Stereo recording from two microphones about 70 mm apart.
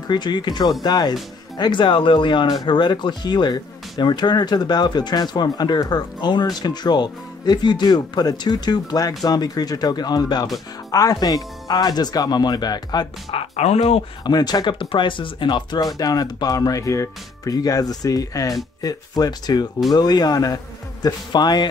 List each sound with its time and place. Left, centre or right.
0.1 s speech: left
0.8 s speech: left
1.6 s speech: left
2.4 s speech: left
10.9 s speech: left
14.2 s speech: left
16.0 s speech: left